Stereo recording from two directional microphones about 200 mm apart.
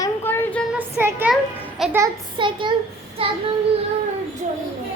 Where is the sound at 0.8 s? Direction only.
10° right (ahead or behind).